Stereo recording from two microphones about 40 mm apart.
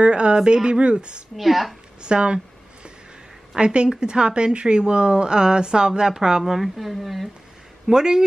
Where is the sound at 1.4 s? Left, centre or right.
Centre.